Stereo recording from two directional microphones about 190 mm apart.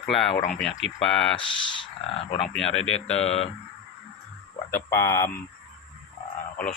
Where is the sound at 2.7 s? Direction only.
90° left.